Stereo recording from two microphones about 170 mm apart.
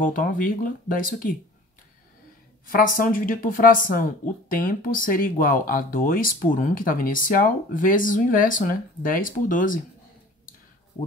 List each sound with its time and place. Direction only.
0.0 s speech: 55° left (ahead or behind)
3.0 s speech: 55° left (ahead or behind)